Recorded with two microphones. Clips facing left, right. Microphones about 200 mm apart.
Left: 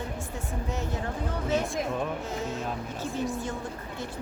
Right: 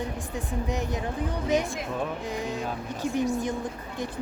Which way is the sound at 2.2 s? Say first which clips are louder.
Right 2 dB; 15° right (ahead or behind).